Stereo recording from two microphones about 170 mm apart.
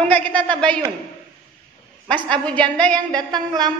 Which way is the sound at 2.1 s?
5° left (ahead or behind).